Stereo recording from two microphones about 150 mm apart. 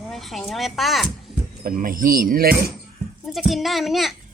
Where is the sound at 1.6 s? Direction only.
70° right (ahead or behind); by 2.7 s 85° right.